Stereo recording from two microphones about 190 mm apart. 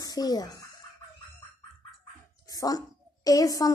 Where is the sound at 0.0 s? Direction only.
20° left (ahead or behind).